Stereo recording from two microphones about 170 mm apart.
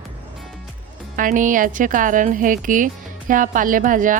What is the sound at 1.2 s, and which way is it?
Speech, 50° right (ahead or behind).